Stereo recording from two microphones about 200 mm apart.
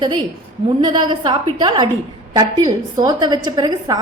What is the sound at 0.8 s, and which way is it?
A woman's voice, 20° right (ahead or behind).